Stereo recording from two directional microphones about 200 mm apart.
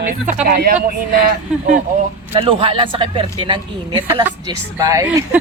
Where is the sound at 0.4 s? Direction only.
50° right (ahead or behind).